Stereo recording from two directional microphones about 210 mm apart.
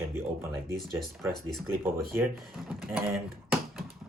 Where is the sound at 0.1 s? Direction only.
10° right (ahead or behind).